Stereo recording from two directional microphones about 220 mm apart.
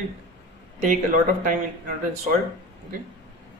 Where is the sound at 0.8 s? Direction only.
35° right (ahead or behind).